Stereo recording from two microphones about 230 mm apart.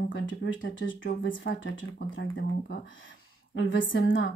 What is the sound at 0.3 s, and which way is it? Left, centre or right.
Speech, left.